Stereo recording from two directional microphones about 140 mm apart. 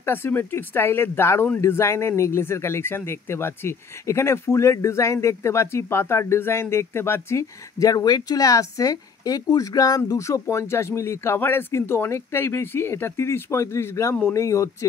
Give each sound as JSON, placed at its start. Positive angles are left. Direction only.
{"t": 0.0, "sound": "speech", "side_deg": 15}